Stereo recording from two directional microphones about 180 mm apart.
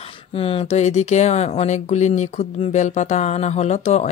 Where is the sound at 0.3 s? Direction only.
30° left (ahead or behind).